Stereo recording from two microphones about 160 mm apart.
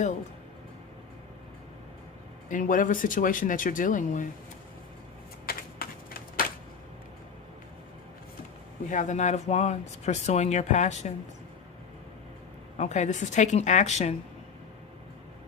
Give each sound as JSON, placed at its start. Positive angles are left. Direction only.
{"t": 2.5, "sound": "speech", "side_deg": 55}
{"t": 5.5, "sound": "typewriter", "side_deg": 65}
{"t": 8.9, "sound": "speech", "side_deg": 50}
{"t": 12.7, "sound": "speech", "side_deg": 50}